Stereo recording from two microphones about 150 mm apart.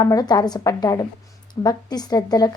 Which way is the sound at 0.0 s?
25° left (ahead or behind).